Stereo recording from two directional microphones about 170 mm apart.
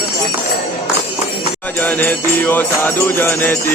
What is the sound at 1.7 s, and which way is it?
Music, 10° left (ahead or behind).